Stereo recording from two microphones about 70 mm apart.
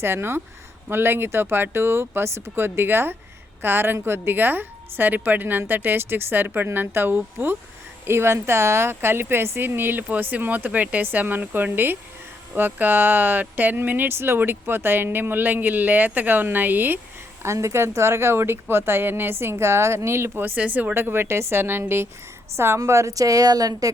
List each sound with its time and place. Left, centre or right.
0.0 s speech: right
17.4 s speech: right
20.9 s speech: right